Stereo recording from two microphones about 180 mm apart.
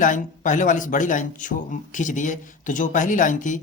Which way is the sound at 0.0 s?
45° left (ahead or behind).